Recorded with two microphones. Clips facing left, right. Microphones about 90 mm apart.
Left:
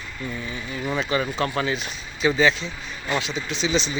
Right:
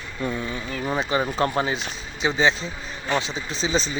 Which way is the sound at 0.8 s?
30° right (ahead or behind).